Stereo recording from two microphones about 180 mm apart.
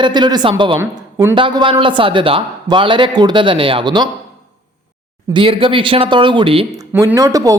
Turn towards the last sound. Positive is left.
turn(degrees=-20)  # may be behind; listen again after turning